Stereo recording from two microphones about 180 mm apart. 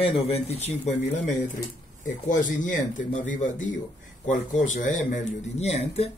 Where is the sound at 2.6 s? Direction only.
45° left (ahead or behind).